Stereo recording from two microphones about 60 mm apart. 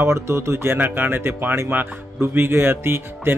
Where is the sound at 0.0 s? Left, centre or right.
Right.